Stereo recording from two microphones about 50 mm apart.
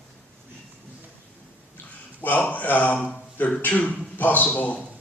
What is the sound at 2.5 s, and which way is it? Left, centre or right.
A man's voice, left.